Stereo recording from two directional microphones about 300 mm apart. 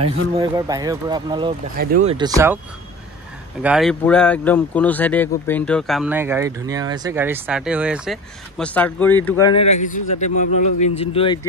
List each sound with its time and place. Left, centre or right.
0.4 s speech: centre
3.6 s speech: centre